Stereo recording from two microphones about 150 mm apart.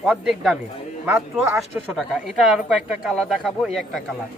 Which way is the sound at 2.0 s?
5° right (ahead or behind).